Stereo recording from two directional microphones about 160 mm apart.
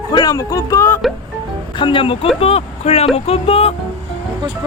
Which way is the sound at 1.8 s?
30° left (ahead or behind).